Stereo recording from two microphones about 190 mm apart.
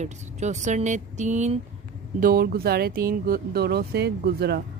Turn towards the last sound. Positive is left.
turn(degrees=-55)  # may be behind; listen again after turning